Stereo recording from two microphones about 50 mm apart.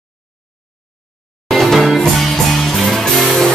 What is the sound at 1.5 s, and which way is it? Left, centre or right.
Music, centre.